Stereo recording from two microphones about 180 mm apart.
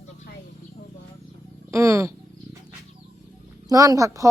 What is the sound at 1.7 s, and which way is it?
Wild animals, 15° right (ahead or behind).